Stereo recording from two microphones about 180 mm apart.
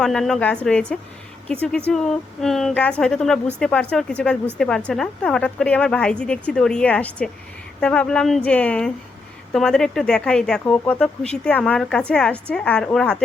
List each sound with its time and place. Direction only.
0.0 s speech: 5° left (ahead or behind)